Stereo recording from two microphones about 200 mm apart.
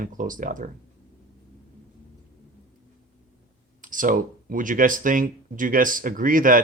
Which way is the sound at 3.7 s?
40° right (ahead or behind).